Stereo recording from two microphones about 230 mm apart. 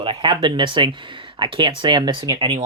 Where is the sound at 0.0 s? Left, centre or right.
Right.